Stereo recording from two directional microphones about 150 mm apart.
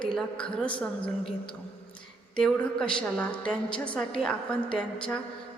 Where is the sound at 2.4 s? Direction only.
5° left (ahead or behind).